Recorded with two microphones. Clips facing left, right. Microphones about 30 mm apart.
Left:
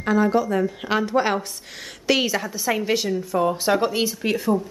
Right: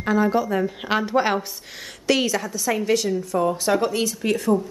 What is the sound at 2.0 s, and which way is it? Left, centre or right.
A woman's voice, centre.